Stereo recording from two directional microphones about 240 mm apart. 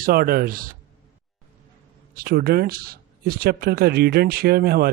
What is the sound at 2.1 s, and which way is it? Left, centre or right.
Speech, right.